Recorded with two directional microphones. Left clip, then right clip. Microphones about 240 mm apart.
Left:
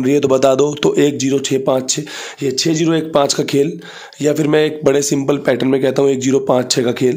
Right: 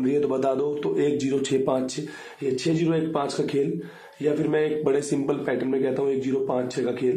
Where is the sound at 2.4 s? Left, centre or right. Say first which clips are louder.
Left 8 dB; left.